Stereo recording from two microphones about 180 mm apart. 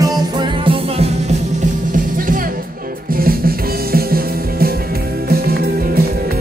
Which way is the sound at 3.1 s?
55° right (ahead or behind).